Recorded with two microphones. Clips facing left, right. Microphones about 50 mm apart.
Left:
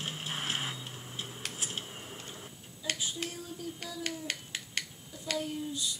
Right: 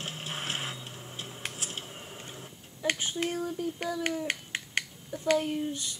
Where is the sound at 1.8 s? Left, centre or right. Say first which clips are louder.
Right 1 dB; centre.